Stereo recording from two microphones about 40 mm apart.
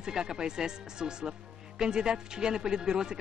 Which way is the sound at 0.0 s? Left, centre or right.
Centre.